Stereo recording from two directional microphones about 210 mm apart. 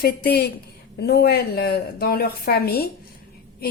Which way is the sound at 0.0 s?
50° left (ahead or behind).